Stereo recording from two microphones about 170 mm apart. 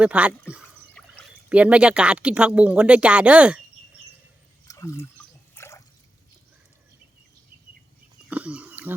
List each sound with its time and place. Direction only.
0.0 s speech: 5° right (ahead or behind)
1.0 s pour: 5° left (ahead or behind)
1.5 s speech: 5° right (ahead or behind)
4.7 s water: 20° left (ahead or behind)
8.3 s pig: 5° right (ahead or behind)